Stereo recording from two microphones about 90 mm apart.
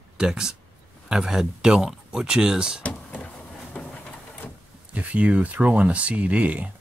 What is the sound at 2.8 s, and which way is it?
Power windows, 20° left (ahead or behind).